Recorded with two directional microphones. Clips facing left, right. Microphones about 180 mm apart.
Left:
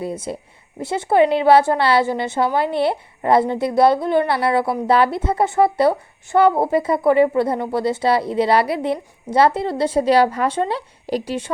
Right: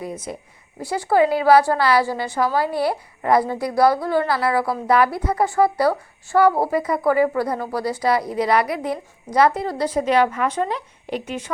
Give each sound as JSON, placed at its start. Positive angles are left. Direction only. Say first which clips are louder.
{"t": 0.0, "sound": "a woman's voice", "louder": "left 4 dB", "side_deg": 30}